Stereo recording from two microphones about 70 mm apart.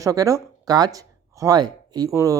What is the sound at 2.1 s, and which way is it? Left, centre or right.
Speech, right.